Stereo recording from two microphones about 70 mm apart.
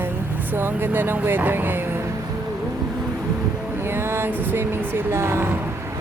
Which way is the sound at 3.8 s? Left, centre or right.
Right.